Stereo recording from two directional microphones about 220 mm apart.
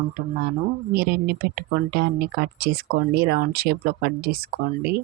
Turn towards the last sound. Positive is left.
turn(degrees=-45)  # may be behind; listen again after turning